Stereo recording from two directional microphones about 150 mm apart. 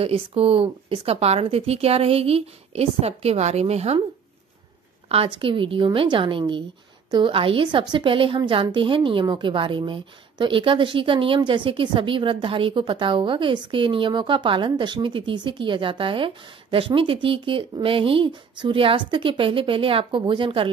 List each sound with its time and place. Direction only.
0.0 s speech: 40° right (ahead or behind)
5.1 s a woman's voice: 35° right (ahead or behind)